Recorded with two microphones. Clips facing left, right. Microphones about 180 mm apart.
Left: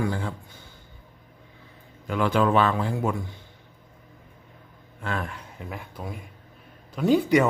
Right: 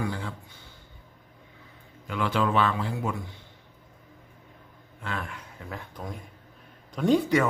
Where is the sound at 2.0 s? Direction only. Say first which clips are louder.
Left 4 dB; 45° left (ahead or behind).